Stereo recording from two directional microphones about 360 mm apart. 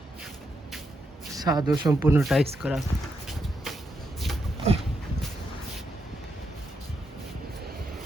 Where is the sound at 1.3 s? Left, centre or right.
Centre.